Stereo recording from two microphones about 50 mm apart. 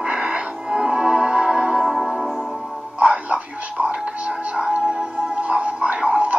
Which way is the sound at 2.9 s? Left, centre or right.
Right.